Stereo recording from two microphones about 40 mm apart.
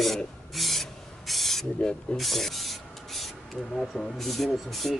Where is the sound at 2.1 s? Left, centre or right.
Centre.